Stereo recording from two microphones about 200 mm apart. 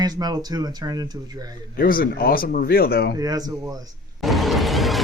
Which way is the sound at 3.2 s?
20° right (ahead or behind).